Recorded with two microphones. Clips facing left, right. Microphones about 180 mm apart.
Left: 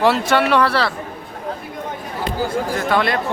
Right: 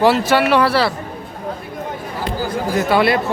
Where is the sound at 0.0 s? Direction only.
Centre (ahead or behind).